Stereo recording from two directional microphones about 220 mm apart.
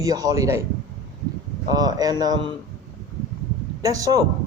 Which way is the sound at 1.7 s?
20° right (ahead or behind).